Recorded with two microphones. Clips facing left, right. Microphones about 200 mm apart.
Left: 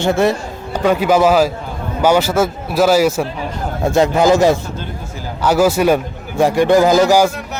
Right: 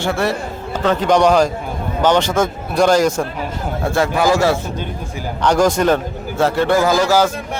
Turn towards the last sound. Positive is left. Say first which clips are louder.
# left 3 dB
turn(degrees=15)  # may be behind; listen again after turning